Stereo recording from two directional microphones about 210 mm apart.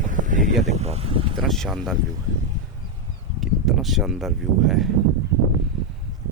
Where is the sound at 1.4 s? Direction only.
Centre (ahead or behind).